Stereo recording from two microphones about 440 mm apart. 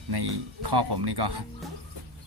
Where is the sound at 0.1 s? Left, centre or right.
Right.